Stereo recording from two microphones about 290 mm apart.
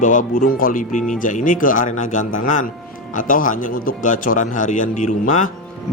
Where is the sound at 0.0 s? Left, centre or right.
Left.